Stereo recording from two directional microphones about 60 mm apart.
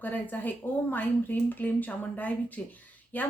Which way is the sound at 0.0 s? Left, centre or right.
Left.